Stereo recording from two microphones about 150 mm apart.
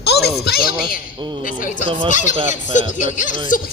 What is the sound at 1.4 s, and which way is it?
Speech, 65° left (ahead or behind).